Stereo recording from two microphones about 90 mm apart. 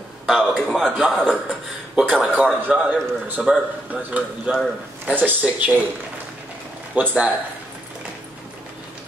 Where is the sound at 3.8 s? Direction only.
15° right (ahead or behind).